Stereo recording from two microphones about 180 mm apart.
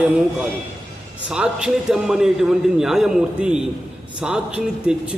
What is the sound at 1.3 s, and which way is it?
A man's voice, 5° right (ahead or behind).